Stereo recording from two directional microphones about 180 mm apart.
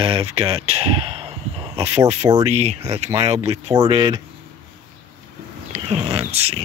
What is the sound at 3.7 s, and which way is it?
Speech, 20° right (ahead or behind).